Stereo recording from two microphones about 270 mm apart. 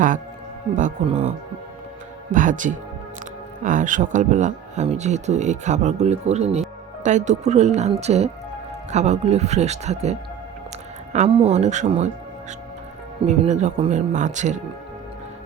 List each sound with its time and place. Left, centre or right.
0.8 s speech: right
2.3 s speech: right
13.2 s speech: right